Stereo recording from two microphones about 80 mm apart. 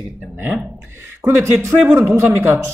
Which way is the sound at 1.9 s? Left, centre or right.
Right.